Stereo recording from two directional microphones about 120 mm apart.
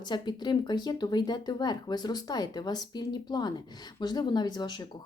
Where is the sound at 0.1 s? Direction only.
35° left (ahead or behind).